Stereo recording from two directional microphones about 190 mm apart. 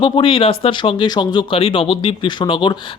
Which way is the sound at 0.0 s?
25° left (ahead or behind).